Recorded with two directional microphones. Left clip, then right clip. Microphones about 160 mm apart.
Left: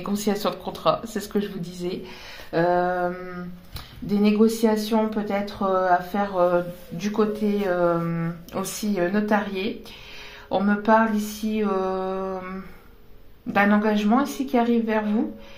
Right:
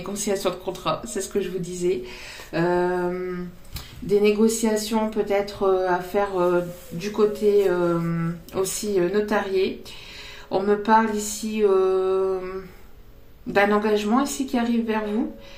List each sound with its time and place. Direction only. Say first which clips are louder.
0.0 s speech: even; 45° left (ahead or behind)